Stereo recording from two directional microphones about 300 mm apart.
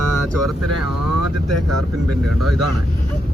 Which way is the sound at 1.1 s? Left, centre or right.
Right.